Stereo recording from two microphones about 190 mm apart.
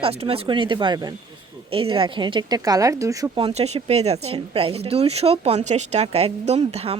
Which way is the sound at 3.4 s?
30° right (ahead or behind).